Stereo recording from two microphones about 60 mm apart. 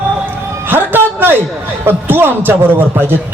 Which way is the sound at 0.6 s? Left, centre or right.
Right.